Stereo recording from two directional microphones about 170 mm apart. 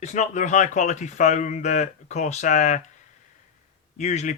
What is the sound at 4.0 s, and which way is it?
Speech, 45° left (ahead or behind).